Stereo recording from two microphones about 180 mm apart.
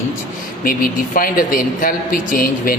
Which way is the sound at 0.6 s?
50° left (ahead or behind).